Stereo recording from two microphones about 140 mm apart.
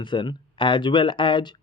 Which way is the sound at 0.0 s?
35° left (ahead or behind).